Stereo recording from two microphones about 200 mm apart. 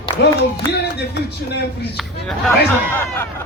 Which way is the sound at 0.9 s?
55° left (ahead or behind).